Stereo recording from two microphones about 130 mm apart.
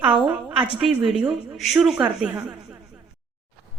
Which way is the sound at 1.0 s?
5° right (ahead or behind).